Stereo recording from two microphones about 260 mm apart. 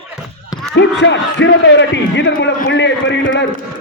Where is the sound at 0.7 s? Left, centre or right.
Left.